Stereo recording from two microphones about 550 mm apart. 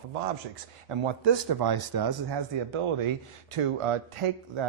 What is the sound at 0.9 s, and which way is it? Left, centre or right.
Speech, right.